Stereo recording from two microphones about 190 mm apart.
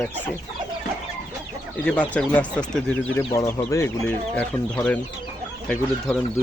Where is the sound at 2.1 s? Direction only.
5° left (ahead or behind).